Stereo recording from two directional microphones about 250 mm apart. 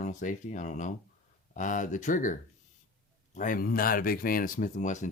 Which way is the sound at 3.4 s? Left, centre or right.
Left.